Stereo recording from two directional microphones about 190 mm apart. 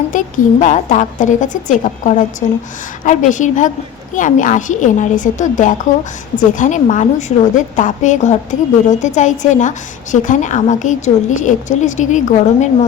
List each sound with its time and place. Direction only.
0.1 s a woman's voice: 40° left (ahead or behind)